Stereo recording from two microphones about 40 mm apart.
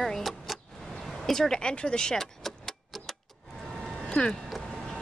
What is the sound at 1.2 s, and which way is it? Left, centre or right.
Speech, centre.